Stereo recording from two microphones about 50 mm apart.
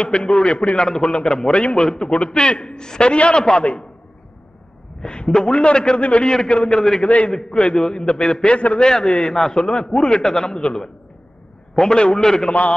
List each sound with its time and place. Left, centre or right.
0.0 s a man's voice: centre
0.8 s a man's voice: centre
5.0 s a man's voice: centre
7.1 s a man's voice: left
7.3 s a man's voice: centre